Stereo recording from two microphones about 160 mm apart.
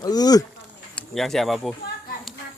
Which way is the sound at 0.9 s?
Centre (ahead or behind).